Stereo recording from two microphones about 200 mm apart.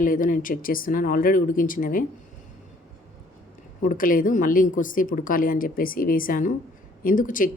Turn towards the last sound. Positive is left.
turn(degrees=40)  # may be behind; listen again after turning